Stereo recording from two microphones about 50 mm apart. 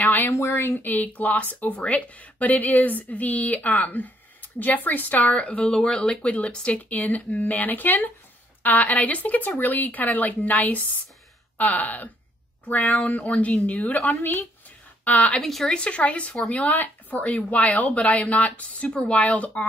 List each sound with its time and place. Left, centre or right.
0.0 s a sound: left
0.6 s speech: left
15.4 s speech: centre
15.7 s speech: left